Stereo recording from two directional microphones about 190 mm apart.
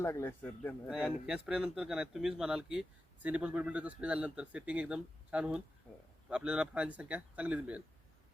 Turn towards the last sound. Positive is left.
turn(degrees=-5)  # may be behind; listen again after turning